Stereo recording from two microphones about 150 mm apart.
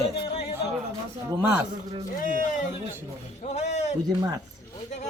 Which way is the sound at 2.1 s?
60° left (ahead or behind).